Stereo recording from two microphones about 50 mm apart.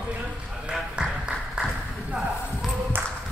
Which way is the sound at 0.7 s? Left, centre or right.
Centre.